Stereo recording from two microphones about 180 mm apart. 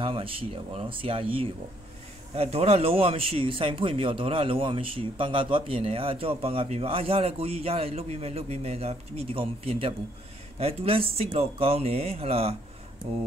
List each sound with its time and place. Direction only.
0.0 s speech: 30° right (ahead or behind)